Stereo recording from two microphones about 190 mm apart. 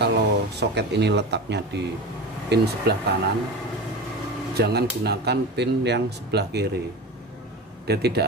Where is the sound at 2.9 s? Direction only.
60° right (ahead or behind).